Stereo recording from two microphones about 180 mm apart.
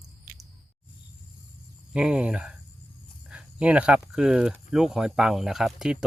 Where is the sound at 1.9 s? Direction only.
5° right (ahead or behind).